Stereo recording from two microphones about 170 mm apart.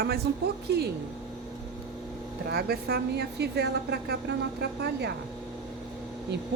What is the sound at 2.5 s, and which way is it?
A woman's voice, 70° right (ahead or behind).